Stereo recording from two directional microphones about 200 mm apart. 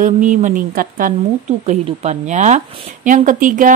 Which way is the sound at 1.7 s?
35° right (ahead or behind).